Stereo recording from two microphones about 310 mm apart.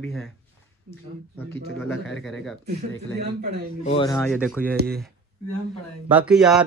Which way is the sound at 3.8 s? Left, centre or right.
Centre.